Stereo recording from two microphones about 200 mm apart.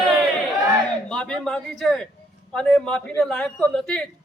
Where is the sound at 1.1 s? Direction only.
5° left (ahead or behind).